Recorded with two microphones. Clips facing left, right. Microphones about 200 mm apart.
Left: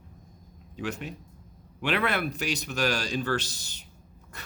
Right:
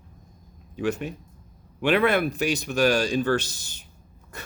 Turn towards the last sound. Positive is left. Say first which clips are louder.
# right 5 dB
turn(degrees=-50)  # may be behind; listen again after turning